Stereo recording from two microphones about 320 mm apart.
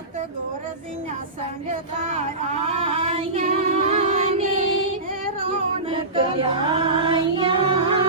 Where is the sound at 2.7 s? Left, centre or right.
Centre.